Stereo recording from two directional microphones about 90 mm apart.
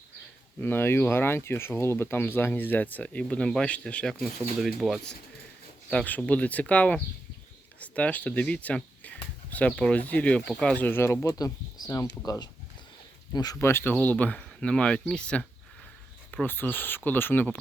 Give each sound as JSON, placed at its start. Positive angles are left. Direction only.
{"t": 0.6, "sound": "speech", "side_deg": 25}
{"t": 4.1, "sound": "speech", "side_deg": 0}
{"t": 5.9, "sound": "speech", "side_deg": 15}
{"t": 13.6, "sound": "speech", "side_deg": 25}
{"t": 13.9, "sound": "speech", "side_deg": 15}